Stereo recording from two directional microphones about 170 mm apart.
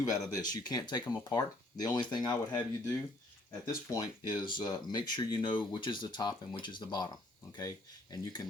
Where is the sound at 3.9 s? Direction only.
25° left (ahead or behind).